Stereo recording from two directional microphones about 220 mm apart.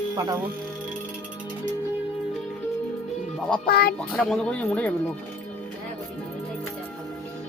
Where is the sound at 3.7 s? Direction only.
45° left (ahead or behind).